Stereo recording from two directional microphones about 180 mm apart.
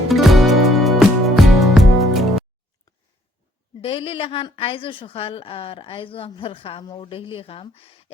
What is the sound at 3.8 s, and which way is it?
A woman's voice, 30° left (ahead or behind).